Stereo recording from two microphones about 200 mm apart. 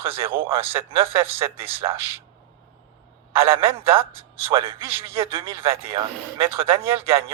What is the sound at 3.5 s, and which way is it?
A man's voice, 25° right (ahead or behind).